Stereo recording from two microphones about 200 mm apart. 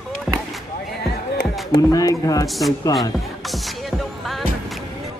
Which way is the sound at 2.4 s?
Centre (ahead or behind).